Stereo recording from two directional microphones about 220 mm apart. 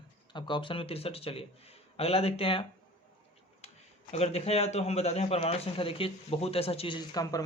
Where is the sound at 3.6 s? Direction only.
30° left (ahead or behind).